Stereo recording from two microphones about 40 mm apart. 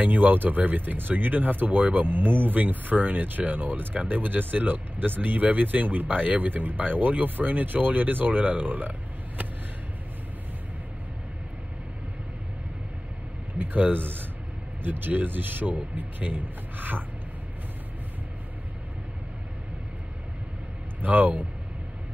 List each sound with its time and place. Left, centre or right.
0.0 s speech: right
13.6 s speech: right
21.0 s speech: right